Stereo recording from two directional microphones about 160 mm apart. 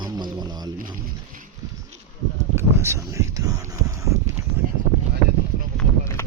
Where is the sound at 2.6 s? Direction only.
15° right (ahead or behind).